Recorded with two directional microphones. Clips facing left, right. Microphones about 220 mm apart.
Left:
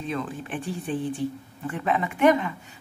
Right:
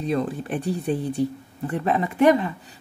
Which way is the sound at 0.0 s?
40° right (ahead or behind).